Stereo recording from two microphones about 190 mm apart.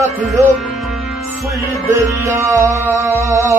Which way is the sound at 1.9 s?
15° right (ahead or behind).